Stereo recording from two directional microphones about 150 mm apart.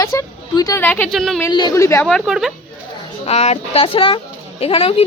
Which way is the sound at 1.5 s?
30° left (ahead or behind).